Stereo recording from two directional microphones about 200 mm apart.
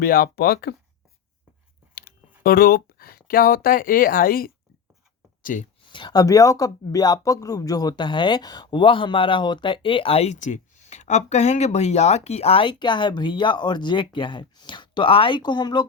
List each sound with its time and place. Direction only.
0.0 s speech: 50° left (ahead or behind)
2.4 s speech: 50° left (ahead or behind)
5.4 s a sound: 45° left (ahead or behind)
5.9 s speech: 20° left (ahead or behind)